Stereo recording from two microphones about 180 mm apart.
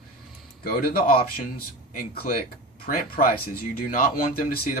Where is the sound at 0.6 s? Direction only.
55° left (ahead or behind).